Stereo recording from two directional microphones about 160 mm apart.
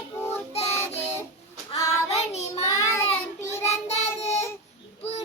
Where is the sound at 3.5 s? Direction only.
40° left (ahead or behind).